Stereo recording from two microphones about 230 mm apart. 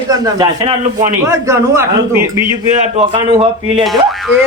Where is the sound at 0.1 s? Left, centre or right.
Centre.